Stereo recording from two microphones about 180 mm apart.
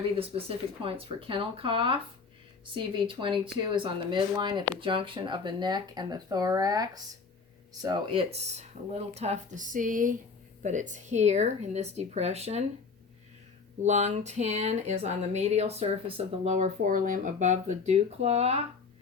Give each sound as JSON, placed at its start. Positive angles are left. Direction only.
{"t": 0.2, "sound": "speech", "side_deg": -30}
{"t": 13.8, "sound": "speech", "side_deg": -40}